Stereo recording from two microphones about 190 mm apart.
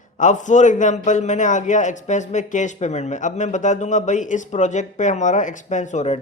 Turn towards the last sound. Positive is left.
turn(degrees=35)  # may be behind; listen again after turning